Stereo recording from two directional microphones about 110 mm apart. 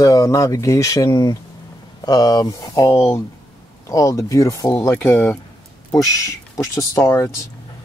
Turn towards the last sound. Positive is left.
turn(degrees=25)  # may be behind; listen again after turning